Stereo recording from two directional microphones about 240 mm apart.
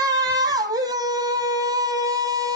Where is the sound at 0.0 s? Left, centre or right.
Centre.